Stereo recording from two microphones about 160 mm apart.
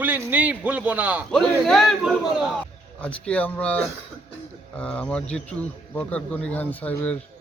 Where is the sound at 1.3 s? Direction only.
Centre (ahead or behind).